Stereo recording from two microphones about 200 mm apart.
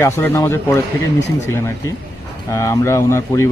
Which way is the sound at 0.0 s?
15° left (ahead or behind).